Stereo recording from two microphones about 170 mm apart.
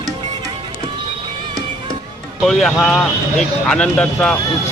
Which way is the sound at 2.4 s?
Centre (ahead or behind).